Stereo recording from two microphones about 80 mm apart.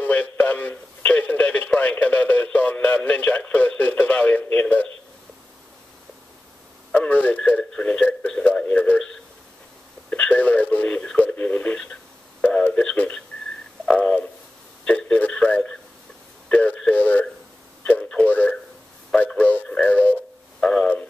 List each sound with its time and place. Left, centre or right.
0.0 s radio: centre
6.9 s radio: centre
10.0 s radio: centre
13.9 s a sound: centre
14.9 s radio: centre
16.4 s a sound: centre